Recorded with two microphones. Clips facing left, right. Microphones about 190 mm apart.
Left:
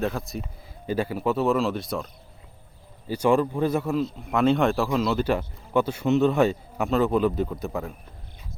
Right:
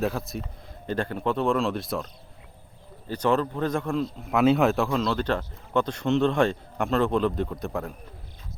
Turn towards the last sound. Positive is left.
turn(degrees=0)  # may be behind; listen again after turning